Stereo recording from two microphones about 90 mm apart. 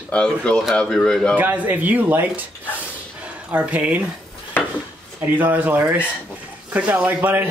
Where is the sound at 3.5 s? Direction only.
15° right (ahead or behind).